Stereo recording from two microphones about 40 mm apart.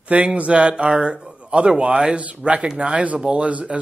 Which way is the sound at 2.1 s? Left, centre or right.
Right.